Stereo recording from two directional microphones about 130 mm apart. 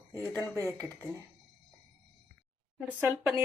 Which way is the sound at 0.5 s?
25° right (ahead or behind).